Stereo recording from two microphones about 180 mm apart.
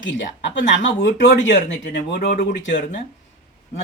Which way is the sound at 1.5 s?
80° left.